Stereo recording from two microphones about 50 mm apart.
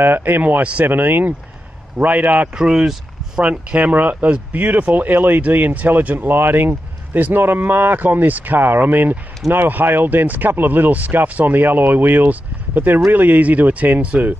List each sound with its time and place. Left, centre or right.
0.0 s speech: right
2.5 s speech: centre
3.4 s speech: right